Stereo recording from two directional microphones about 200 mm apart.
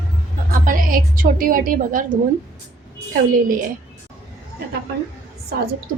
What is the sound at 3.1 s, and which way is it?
Speech, 45° right (ahead or behind).